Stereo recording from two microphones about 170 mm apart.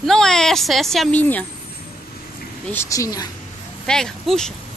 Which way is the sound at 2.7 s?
15° left (ahead or behind).